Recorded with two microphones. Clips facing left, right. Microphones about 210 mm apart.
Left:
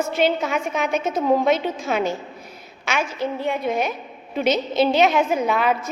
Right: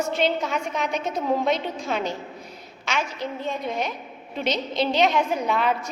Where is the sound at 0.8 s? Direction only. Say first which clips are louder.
Left 4 dB; 50° left (ahead or behind).